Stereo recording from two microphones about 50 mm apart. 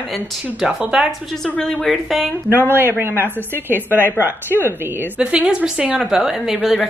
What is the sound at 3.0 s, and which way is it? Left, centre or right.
A woman's voice, right.